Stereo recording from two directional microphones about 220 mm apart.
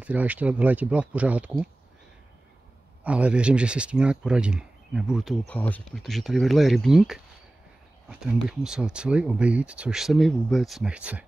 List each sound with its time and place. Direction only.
0.0 s speech: 5° right (ahead or behind)
3.0 s speech: 5° right (ahead or behind)